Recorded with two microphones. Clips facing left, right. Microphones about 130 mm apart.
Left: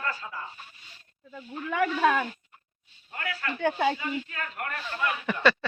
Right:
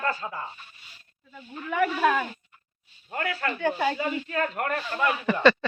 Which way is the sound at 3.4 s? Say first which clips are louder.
Left 1 dB; 45° right (ahead or behind).